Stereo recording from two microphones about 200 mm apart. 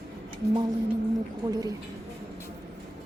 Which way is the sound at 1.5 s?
20° right (ahead or behind).